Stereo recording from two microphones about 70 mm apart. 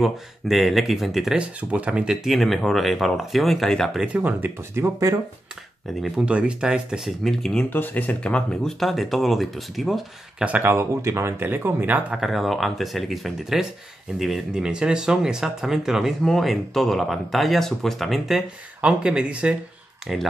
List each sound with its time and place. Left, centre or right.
0.0 s speech: centre
2.2 s speech: centre
4.1 s speech: right
6.2 s speech: centre
7.1 s speech: centre
7.7 s speech: left
8.7 s speech: centre
10.4 s speech: right
10.7 s speech: right
12.1 s speech: centre
18.8 s speech: centre